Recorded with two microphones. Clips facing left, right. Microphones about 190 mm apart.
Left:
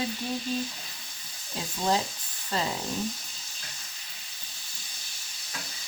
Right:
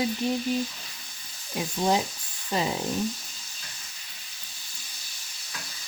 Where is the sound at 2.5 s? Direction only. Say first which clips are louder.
Right 3 dB; 15° right (ahead or behind).